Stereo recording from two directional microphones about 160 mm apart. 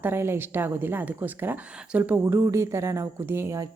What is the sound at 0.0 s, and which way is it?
A woman's voice, 15° right (ahead or behind).